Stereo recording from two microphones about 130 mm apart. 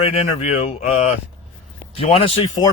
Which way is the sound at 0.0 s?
50° left (ahead or behind).